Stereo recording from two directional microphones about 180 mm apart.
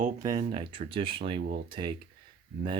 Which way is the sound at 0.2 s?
20° right (ahead or behind).